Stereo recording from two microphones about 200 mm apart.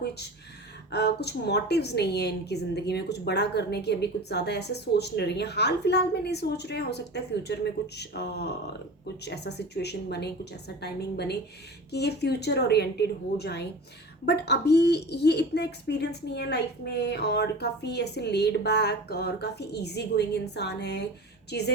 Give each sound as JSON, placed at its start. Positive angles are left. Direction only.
{"t": 0.9, "sound": "a woman's voice", "side_deg": 55}